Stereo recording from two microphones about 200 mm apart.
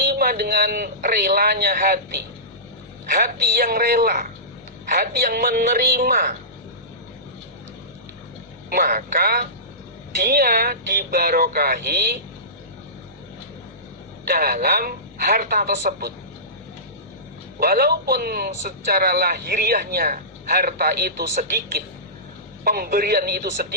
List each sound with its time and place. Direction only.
0.0 s a man's voice: 50° right (ahead or behind)
8.7 s a man's voice: 45° right (ahead or behind)
14.3 s a man's voice: 50° right (ahead or behind)
17.6 s a man's voice: 50° right (ahead or behind)